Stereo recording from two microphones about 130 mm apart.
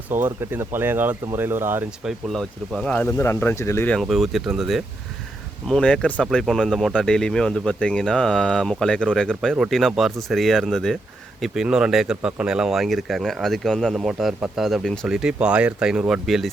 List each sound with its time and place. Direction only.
0.1 s speech: 15° right (ahead or behind)
2.0 s speech: centre (ahead or behind)
3.1 s speech: 20° left (ahead or behind)
4.0 s speech: centre (ahead or behind)